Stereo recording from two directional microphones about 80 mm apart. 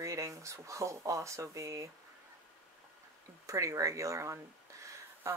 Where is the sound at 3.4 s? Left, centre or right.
Right.